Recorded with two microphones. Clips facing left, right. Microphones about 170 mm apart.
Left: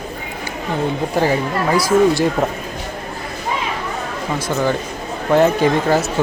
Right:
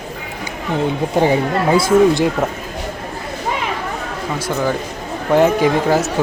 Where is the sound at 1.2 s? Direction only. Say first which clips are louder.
Right 3 dB; 20° right (ahead or behind).